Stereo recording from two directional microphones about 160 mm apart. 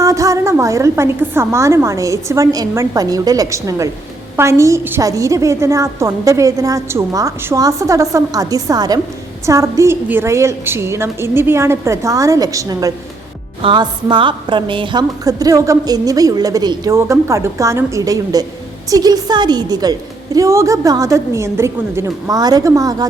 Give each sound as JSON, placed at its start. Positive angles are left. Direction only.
{"t": 0.0, "sound": "a woman's voice", "side_deg": -20}
{"t": 13.6, "sound": "a woman's voice", "side_deg": -30}